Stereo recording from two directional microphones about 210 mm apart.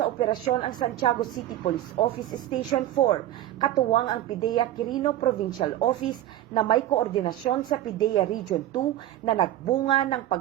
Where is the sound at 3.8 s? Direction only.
20° left (ahead or behind).